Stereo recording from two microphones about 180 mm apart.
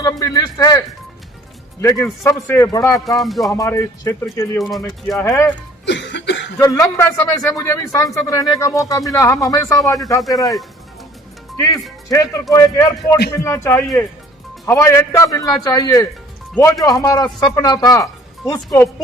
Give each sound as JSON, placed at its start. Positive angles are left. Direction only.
{"t": 0.0, "sound": "a man's voice", "side_deg": 20}
{"t": 1.8, "sound": "speech", "side_deg": 15}
{"t": 3.2, "sound": "speech", "side_deg": 0}
{"t": 3.5, "sound": "speech", "side_deg": 15}
{"t": 5.8, "sound": "cough", "side_deg": 80}
{"t": 6.6, "sound": "a man's voice", "side_deg": 20}
{"t": 10.2, "sound": "speech", "side_deg": 0}
{"t": 12.0, "sound": "a man's voice", "side_deg": 20}